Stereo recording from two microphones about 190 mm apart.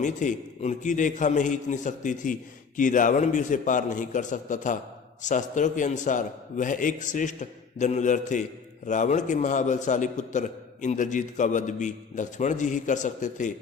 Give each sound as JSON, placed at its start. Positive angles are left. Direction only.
{"t": 0.0, "sound": "a man's voice", "side_deg": 40}